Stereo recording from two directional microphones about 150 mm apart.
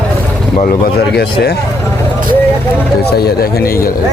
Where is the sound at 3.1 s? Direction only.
90° left.